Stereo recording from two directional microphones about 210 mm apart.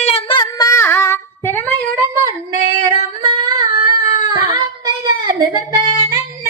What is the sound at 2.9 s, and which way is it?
Singing, 20° right (ahead or behind).